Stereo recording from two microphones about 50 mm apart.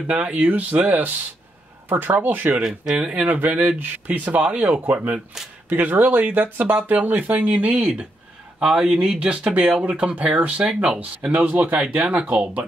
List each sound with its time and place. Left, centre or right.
0.0 s speech: right
2.6 s speech: centre
3.1 s speech: right
8.5 s speech: centre; by 12.2 s right
12.2 s speech: centre